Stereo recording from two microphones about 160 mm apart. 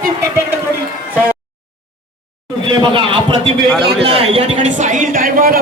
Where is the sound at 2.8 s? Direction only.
30° right (ahead or behind).